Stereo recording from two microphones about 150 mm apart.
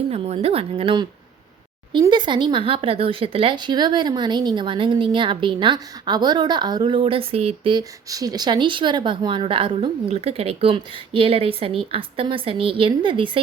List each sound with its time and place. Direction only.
0.1 s speech: 40° right (ahead or behind)